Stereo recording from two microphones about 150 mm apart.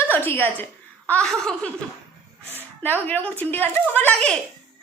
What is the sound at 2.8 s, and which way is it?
A woman's voice, 10° left (ahead or behind).